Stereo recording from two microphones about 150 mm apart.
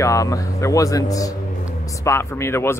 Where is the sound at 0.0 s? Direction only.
20° left (ahead or behind).